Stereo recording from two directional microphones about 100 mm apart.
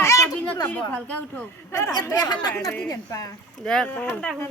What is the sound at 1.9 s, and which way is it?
Speech, 45° left (ahead or behind).